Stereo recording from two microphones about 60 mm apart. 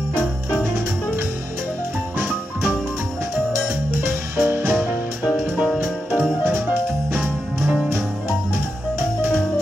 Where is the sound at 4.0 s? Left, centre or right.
Right.